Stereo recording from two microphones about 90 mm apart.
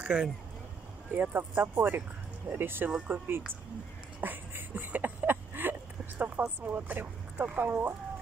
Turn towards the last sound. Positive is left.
turn(degrees=-20)  # may be behind; listen again after turning